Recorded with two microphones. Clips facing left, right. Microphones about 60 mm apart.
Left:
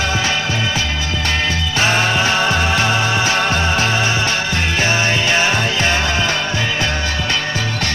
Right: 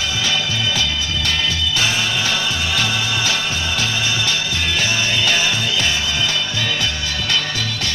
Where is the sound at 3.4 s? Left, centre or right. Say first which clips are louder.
Left 6 dB; left.